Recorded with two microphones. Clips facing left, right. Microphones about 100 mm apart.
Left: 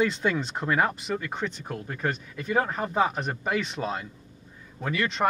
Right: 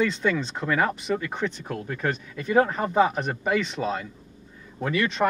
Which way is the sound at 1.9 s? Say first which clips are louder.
Right 2 dB; 25° left (ahead or behind).